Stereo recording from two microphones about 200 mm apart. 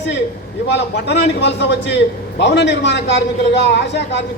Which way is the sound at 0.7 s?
60° left (ahead or behind).